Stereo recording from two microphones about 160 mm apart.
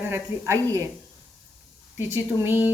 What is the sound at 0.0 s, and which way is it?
Speech, 15° right (ahead or behind).